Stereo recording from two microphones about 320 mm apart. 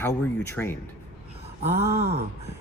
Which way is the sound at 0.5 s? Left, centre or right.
Centre.